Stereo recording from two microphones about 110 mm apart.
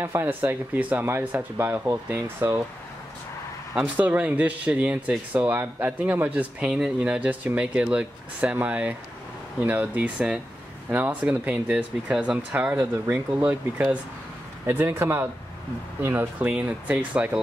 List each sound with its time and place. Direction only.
0.0 s speech: 20° right (ahead or behind)
3.7 s speech: 15° right (ahead or behind)